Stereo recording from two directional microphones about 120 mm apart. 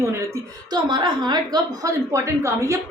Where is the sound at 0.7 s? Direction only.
40° right (ahead or behind).